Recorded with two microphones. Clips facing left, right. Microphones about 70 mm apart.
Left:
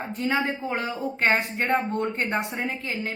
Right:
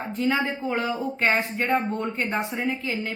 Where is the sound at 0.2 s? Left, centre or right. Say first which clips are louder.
Right 1 dB; left.